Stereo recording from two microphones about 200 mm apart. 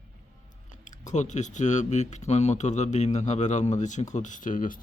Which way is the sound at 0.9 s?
35° left (ahead or behind).